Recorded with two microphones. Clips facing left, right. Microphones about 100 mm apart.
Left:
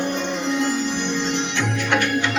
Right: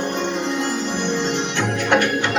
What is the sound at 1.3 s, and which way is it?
Music, 45° right (ahead or behind).